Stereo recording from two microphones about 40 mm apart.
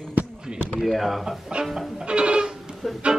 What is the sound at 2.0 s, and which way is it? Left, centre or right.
Music, right.